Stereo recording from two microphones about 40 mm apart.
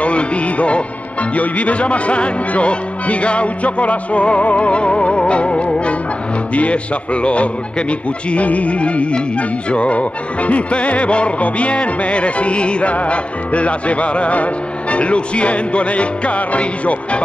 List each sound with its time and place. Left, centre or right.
0.0 s music: left